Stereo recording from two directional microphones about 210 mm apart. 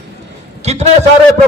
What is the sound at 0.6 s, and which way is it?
Speech, 30° right (ahead or behind).